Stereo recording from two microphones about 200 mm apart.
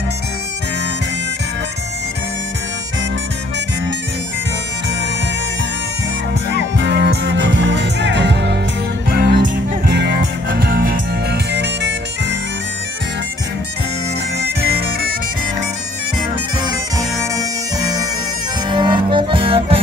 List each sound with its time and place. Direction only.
6.8 s music: 60° right (ahead or behind)
14.4 s bagpipes: 50° right (ahead or behind)
17.2 s music: 15° right (ahead or behind)